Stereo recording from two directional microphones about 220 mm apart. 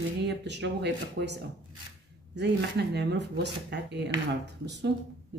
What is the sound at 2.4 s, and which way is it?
Speech, 50° right (ahead or behind).